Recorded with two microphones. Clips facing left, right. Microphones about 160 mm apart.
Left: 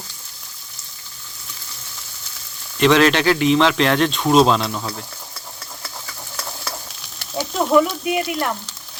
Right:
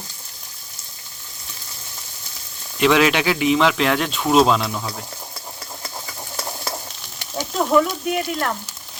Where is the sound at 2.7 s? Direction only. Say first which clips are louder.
Left 2 dB; 5° right (ahead or behind).